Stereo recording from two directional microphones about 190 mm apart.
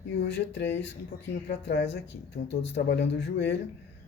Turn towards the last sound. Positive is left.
turn(degrees=65)  # may be behind; listen again after turning